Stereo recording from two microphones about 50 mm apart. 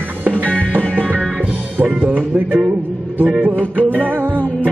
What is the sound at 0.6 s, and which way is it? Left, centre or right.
Music, right.